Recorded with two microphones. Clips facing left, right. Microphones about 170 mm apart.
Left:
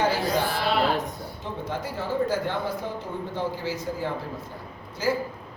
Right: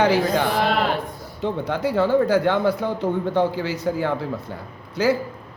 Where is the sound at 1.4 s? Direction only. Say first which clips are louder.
Right 10 dB; 70° right (ahead or behind).